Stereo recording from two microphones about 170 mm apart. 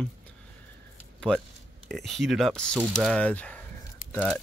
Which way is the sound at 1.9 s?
Centre (ahead or behind).